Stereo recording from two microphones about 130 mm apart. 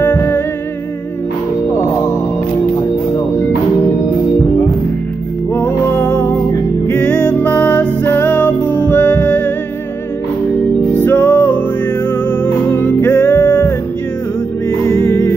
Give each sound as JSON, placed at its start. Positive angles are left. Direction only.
{"t": 0.0, "sound": "music", "side_deg": 20}
{"t": 5.5, "sound": "music", "side_deg": 15}
{"t": 11.0, "sound": "music", "side_deg": 15}
{"t": 12.7, "sound": "music", "side_deg": 15}
{"t": 14.9, "sound": "music", "side_deg": 20}